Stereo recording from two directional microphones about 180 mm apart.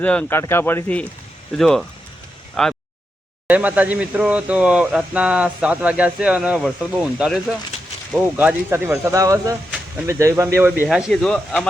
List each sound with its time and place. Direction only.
0.0 s speech: 5° left (ahead or behind)
3.4 s speech: 10° right (ahead or behind)
10.8 s speech: centre (ahead or behind)